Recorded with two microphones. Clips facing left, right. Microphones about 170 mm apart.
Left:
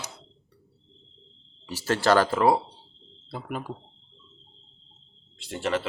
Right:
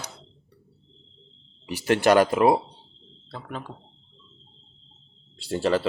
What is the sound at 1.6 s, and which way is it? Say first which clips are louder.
Speech: right 4 dB; 15° right (ahead or behind).